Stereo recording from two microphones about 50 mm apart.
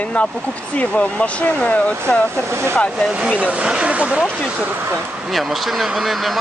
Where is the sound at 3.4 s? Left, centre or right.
Right.